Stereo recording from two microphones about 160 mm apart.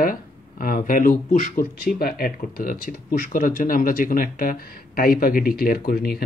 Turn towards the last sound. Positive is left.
turn(degrees=75)  # may be behind; listen again after turning